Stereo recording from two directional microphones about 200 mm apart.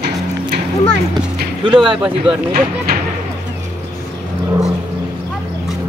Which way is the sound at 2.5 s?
45° right (ahead or behind).